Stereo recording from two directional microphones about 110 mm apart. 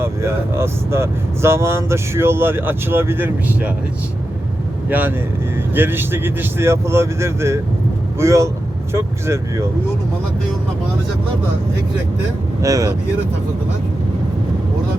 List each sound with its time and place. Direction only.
0.0 s speech: 25° right (ahead or behind)
4.9 s speech: 15° right (ahead or behind)
12.6 s speech: 35° right (ahead or behind)